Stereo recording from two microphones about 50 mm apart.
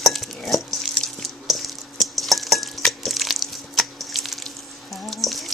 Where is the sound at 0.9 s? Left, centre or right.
Centre.